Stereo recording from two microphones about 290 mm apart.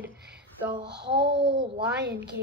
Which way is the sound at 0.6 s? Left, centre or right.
Centre.